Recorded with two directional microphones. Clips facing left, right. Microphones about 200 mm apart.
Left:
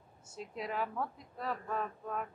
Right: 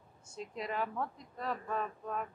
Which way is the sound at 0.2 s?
5° left (ahead or behind).